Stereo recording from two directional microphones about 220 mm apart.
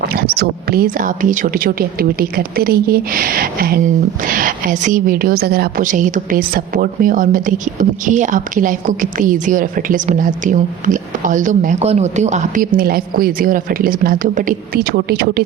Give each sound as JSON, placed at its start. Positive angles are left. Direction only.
{"t": 0.1, "sound": "a woman's voice", "side_deg": -45}